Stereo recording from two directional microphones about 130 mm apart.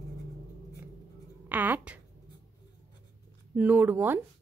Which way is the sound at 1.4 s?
15° right (ahead or behind).